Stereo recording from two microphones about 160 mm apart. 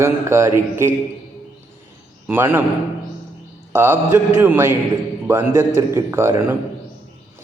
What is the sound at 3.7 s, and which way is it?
A man's voice, 15° right (ahead or behind).